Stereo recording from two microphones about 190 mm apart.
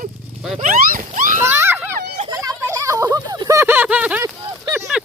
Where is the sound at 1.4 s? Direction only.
10° right (ahead or behind).